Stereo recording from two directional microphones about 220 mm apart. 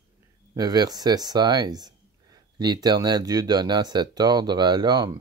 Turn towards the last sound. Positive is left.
turn(degrees=-20)  # may be behind; listen again after turning